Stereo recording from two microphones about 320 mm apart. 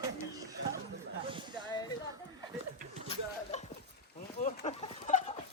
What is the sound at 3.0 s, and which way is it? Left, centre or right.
Chuckle, left.